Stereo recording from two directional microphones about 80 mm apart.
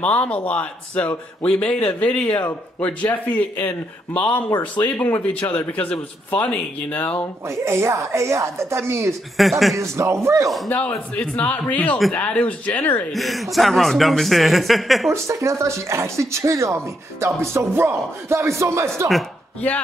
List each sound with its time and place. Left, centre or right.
0.0 s a man's voice: centre
7.4 s speech: right
9.4 s speech: centre
9.9 s speech: right
10.7 s a man's voice: centre
13.1 s speech: centre
15.2 s speech: right